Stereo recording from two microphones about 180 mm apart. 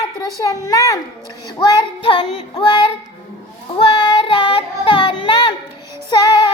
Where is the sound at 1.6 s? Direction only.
25° left (ahead or behind).